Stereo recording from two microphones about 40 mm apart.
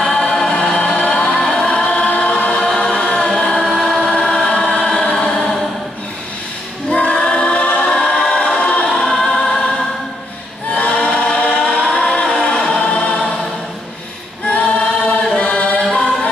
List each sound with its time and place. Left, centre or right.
0.0 s music: centre
1.9 s choir: left; by 4.0 s centre
4.0 s choir: centre
6.9 s choir: left
8.8 s choir: centre
10.7 s choir: left
15.3 s chant: left